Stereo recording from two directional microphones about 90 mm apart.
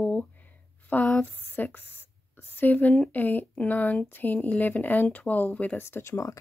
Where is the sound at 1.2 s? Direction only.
20° left (ahead or behind).